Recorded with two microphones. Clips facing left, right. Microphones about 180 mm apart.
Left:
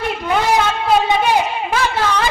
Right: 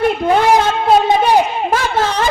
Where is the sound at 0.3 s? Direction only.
50° right (ahead or behind).